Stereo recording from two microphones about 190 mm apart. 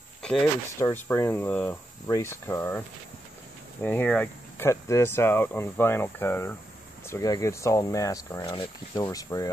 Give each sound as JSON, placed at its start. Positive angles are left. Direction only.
{"t": 0.2, "sound": "a sound", "side_deg": 5}
{"t": 0.7, "sound": "speech", "side_deg": 15}
{"t": 3.8, "sound": "speech", "side_deg": 10}